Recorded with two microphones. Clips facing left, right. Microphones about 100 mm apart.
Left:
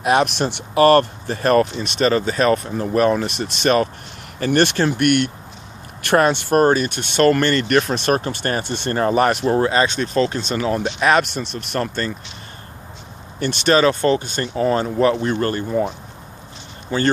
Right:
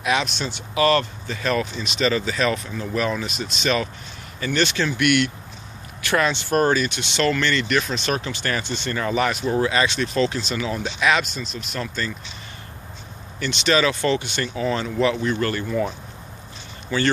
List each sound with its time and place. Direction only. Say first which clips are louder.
0.0 s speech: left 6 dB; 55° left (ahead or behind)
9.6 s speech: left 3 dB; 40° left (ahead or behind)
11.3 s speech: left 6 dB; 60° left (ahead or behind)
13.4 s speech: left 4 dB; 45° left (ahead or behind)
15.1 s speech: left 3 dB; 30° left (ahead or behind)
16.9 s speech: left 2 dB; 35° left (ahead or behind)